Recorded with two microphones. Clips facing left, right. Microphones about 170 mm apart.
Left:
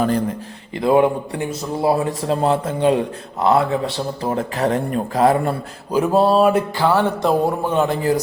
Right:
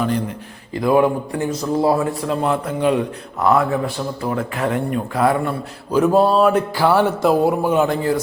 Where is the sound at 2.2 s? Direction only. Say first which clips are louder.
Left 2 dB; 30° left (ahead or behind).